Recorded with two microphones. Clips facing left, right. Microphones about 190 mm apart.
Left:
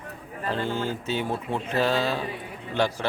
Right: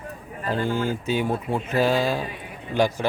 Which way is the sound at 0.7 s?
15° right (ahead or behind).